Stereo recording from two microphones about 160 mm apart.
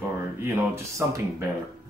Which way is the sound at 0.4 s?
15° right (ahead or behind).